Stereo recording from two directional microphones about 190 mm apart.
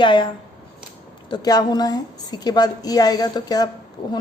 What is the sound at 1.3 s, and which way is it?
A woman's voice, 20° left (ahead or behind).